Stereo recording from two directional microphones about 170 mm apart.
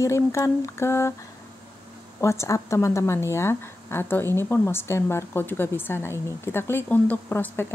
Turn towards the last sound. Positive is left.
turn(degrees=10)  # may be behind; listen again after turning